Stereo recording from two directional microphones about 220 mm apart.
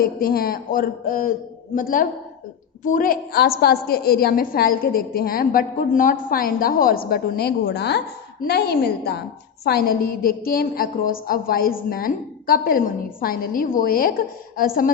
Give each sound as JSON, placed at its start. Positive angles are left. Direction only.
{"t": 0.0, "sound": "a woman's voice", "side_deg": 40}